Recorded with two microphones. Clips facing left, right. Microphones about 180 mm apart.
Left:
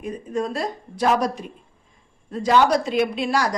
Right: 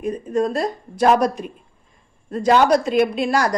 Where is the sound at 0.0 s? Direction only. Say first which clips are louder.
Right 5 dB; 45° right (ahead or behind).